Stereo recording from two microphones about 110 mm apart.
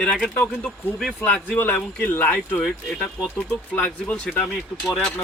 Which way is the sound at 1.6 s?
15° left (ahead or behind).